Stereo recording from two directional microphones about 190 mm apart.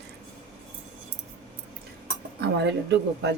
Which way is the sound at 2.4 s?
65° right (ahead or behind).